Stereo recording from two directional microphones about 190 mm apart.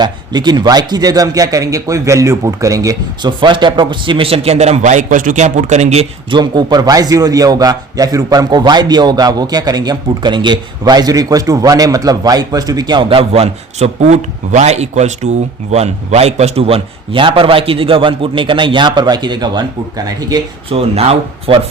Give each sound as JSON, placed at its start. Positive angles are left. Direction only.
{"t": 0.0, "sound": "a man's voice", "side_deg": -20}
{"t": 6.4, "sound": "a man's voice", "side_deg": -20}